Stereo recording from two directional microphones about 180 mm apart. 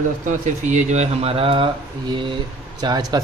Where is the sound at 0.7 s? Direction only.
40° right (ahead or behind).